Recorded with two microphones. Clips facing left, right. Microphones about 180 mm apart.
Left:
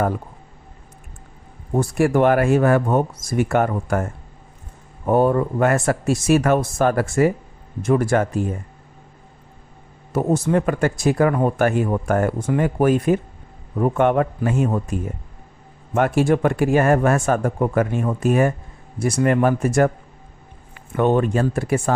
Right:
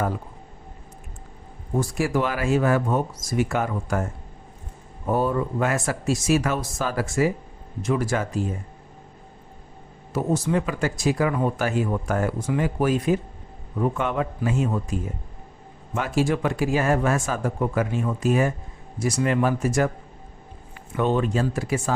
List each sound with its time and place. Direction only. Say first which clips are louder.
1.7 s speech: left 5 dB; 55° left (ahead or behind)
5.0 s speech: left 6 dB; 55° left (ahead or behind)
10.1 s speech: left 4 dB; 50° left (ahead or behind)
16.0 s speech: left 6 dB; 55° left (ahead or behind)
20.9 s speech: left 4 dB; 55° left (ahead or behind)